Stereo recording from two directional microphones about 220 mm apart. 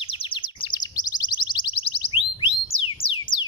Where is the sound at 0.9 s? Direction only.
20° left (ahead or behind).